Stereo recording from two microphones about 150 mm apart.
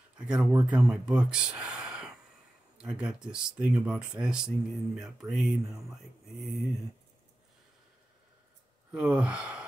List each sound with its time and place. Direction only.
0.2 s speech: 5° right (ahead or behind)
8.9 s sigh: 5° right (ahead or behind)